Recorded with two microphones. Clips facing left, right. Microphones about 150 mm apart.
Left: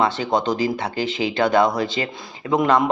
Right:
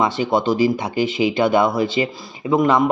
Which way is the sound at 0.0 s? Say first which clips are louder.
Right 2 dB; 10° right (ahead or behind).